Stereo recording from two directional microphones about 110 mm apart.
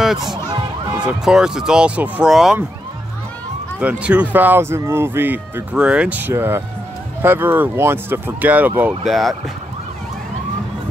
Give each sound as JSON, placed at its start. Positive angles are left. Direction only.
{"t": 0.0, "sound": "a sound", "side_deg": -5}
{"t": 0.9, "sound": "speech", "side_deg": -5}
{"t": 3.8, "sound": "speech", "side_deg": -10}
{"t": 9.0, "sound": "speech", "side_deg": 0}